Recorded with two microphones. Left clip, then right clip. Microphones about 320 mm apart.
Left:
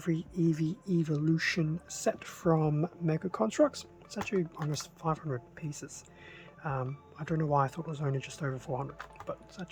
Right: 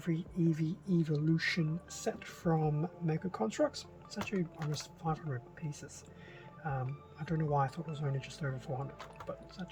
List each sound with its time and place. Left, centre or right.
0.0 s speech: centre